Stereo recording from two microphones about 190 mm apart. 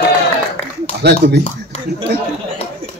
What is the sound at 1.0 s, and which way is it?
Speech, 60° right (ahead or behind).